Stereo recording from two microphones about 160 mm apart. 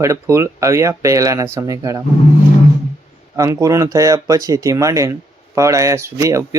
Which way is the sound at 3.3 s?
20° right (ahead or behind).